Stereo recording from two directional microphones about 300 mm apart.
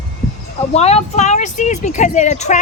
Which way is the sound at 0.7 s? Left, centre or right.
Left.